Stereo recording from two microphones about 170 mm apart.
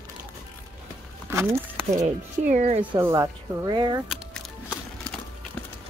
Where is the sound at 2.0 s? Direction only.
45° right (ahead or behind).